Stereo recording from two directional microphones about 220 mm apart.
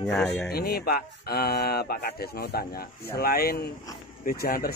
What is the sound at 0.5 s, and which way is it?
Speech, 45° left (ahead or behind).